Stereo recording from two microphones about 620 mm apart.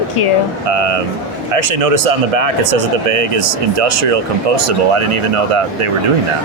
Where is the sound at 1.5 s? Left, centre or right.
Right.